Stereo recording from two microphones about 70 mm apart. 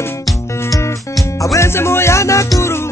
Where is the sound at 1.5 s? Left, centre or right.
Left.